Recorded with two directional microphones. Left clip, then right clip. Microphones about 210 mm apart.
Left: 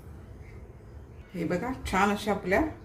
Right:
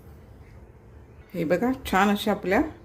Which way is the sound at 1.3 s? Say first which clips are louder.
Right 7 dB; 45° right (ahead or behind).